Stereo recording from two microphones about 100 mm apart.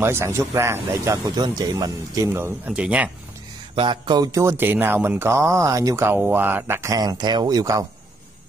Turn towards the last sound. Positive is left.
turn(degrees=-35)  # may be behind; listen again after turning